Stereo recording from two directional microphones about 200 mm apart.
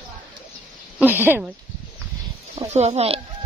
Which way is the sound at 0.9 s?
10° right (ahead or behind).